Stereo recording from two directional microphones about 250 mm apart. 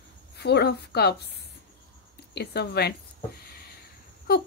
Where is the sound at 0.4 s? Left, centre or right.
Left.